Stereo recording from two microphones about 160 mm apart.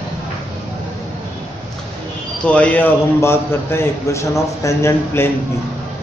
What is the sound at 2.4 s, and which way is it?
A man's voice, 10° left (ahead or behind).